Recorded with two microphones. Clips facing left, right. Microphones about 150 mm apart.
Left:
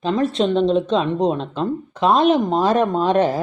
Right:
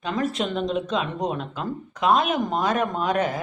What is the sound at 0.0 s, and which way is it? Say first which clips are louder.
Speech: left 7 dB; 25° left (ahead or behind).